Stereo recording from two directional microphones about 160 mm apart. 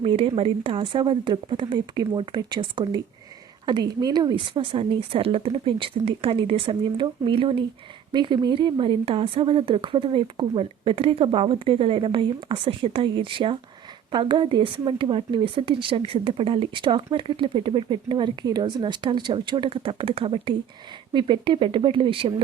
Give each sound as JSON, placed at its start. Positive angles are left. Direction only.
{"t": 0.0, "sound": "speech", "side_deg": -35}